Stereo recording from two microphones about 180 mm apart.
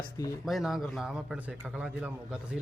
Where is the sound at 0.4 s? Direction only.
Centre (ahead or behind).